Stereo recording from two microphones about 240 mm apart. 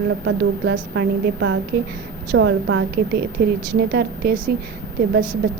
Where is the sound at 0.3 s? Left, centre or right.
Right.